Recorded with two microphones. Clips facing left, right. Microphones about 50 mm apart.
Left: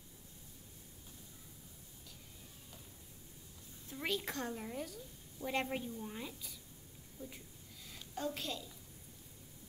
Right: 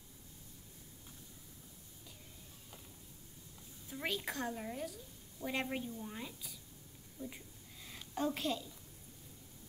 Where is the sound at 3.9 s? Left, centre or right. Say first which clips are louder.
Even; centre.